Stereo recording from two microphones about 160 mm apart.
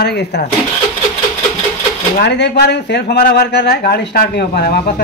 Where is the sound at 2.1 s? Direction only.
90° left.